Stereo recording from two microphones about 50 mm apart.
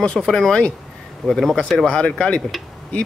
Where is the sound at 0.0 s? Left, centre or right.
Centre.